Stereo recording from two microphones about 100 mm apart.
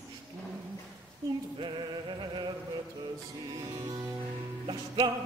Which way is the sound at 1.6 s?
50° right (ahead or behind).